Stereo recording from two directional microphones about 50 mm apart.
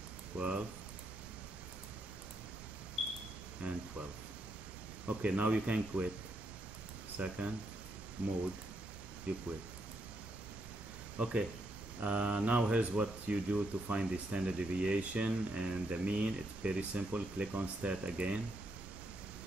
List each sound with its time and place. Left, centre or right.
0.4 s speech: right
3.6 s speech: right
5.0 s speech: right
7.2 s speech: right
12.0 s speech: right